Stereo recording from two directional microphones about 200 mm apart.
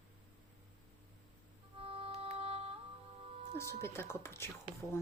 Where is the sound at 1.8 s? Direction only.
30° right (ahead or behind).